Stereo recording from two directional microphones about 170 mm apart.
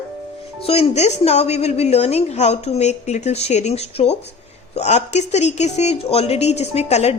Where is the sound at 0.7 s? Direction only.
40° left (ahead or behind).